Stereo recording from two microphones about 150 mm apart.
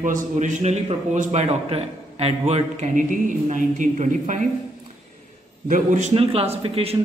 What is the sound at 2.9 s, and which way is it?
Speech, 60° right (ahead or behind).